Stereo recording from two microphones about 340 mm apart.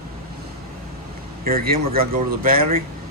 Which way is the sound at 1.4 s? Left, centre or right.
Right.